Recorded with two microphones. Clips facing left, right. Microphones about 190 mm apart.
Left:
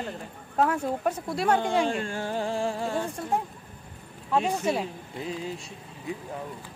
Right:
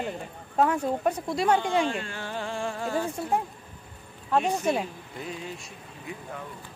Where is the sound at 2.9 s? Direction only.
Centre (ahead or behind).